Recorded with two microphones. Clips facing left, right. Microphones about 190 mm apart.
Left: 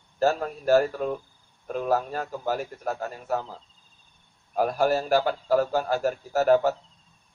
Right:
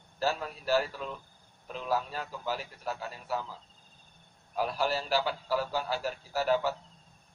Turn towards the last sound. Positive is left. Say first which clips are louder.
# left 8 dB
turn(degrees=50)  # may be behind; listen again after turning